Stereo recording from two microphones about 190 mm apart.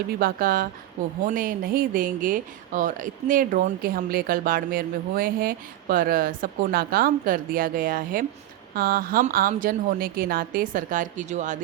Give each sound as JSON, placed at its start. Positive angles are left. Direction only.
{"t": 0.2, "sound": "speech", "side_deg": -50}